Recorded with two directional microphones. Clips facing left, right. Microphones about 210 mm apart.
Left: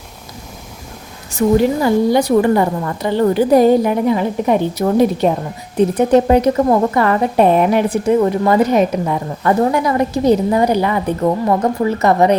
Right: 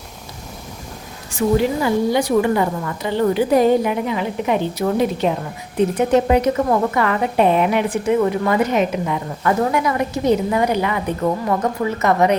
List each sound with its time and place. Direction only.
1.3 s a woman's voice: 40° left (ahead or behind)